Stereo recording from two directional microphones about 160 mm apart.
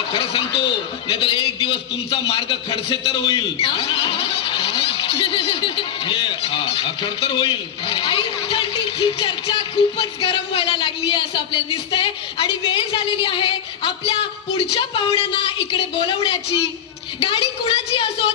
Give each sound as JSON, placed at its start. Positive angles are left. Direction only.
{"t": 0.1, "sound": "a man's voice", "side_deg": 35}